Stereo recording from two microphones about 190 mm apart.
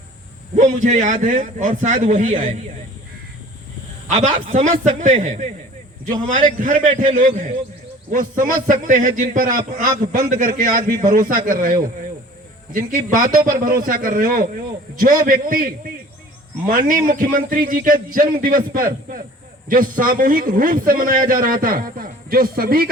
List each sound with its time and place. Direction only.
0.5 s a man's voice: 40° right (ahead or behind)
4.1 s a man's voice: 40° right (ahead or behind)